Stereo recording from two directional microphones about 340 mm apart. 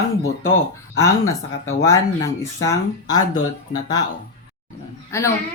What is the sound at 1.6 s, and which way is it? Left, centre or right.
Speech, centre.